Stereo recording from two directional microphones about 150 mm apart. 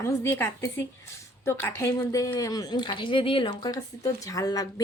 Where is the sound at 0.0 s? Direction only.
15° left (ahead or behind).